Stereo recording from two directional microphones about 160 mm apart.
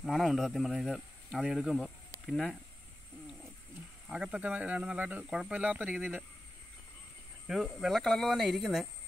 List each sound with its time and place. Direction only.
0.0 s speech: centre (ahead or behind)
4.1 s speech: 5° right (ahead or behind)
7.4 s speech: centre (ahead or behind)